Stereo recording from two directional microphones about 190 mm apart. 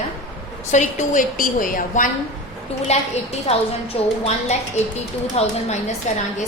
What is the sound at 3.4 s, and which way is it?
Speech, 30° left (ahead or behind).